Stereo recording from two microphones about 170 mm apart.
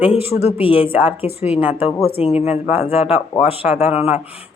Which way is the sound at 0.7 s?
10° right (ahead or behind).